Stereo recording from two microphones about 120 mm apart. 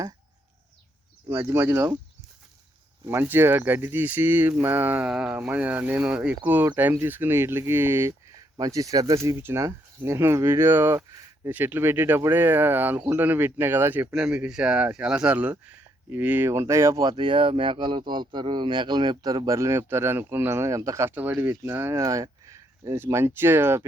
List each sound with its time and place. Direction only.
1.3 s speech: 25° right (ahead or behind)
3.1 s speech: 20° right (ahead or behind)
10.9 s a sound: 25° right (ahead or behind)
11.5 s speech: 15° right (ahead or behind)